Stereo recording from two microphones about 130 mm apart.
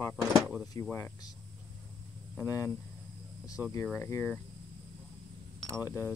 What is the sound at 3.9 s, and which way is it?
Speech, 20° left (ahead or behind).